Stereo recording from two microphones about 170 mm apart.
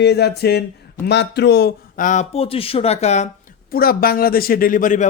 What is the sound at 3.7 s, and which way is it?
Speech, 60° left (ahead or behind).